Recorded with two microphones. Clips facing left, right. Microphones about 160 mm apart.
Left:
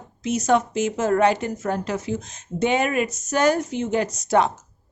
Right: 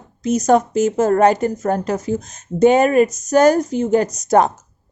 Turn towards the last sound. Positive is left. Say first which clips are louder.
# right 5 dB
turn(degrees=-45)  # may be behind; listen again after turning